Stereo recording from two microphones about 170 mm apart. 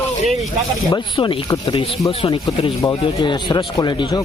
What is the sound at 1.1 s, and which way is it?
Speech, 35° left (ahead or behind).